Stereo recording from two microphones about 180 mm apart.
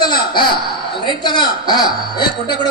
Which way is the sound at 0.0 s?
60° left (ahead or behind).